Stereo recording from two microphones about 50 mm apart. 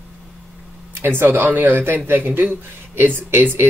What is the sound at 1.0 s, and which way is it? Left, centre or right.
Speech, right.